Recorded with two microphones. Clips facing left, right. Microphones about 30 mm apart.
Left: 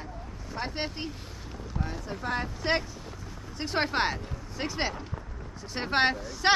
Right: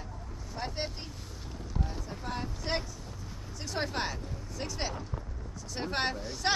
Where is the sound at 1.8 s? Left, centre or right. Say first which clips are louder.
Left 7 dB; left.